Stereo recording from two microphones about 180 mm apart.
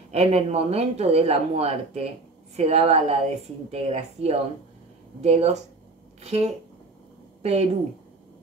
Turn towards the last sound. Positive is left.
turn(degrees=-35)  # may be behind; listen again after turning